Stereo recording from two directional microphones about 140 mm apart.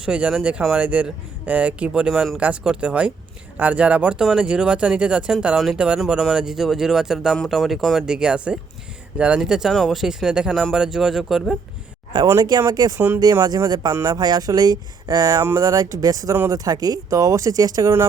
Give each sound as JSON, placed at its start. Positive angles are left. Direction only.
{"t": 0.0, "sound": "speech", "side_deg": -5}
{"t": 12.1, "sound": "speech", "side_deg": -25}